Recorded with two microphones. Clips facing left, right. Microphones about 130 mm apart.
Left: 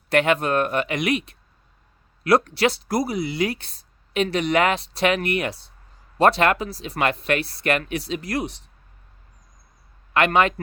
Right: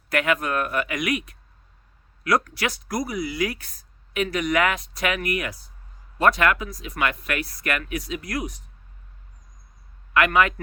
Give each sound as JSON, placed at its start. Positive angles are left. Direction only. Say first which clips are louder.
{"t": 0.1, "sound": "speech", "louder": "left 4 dB", "side_deg": 30}
{"t": 10.2, "sound": "speech", "louder": "left 1 dB", "side_deg": 30}